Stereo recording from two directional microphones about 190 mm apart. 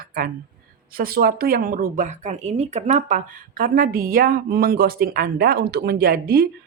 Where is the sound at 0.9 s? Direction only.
50° right (ahead or behind).